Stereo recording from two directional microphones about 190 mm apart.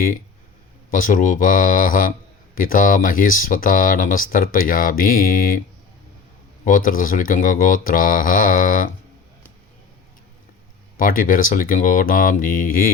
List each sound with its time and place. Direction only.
0.9 s speech: 45° left (ahead or behind)
6.7 s speech: 45° left (ahead or behind)
10.9 s speech: 45° left (ahead or behind)